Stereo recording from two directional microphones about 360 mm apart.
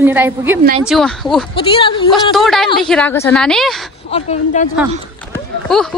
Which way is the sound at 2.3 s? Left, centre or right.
Centre.